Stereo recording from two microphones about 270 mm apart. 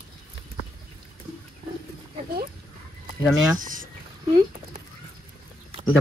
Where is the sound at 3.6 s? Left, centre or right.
Right.